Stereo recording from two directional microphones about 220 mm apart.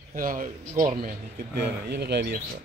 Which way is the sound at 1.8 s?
50° right (ahead or behind).